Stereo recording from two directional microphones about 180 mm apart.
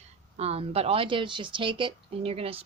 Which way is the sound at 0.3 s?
35° right (ahead or behind).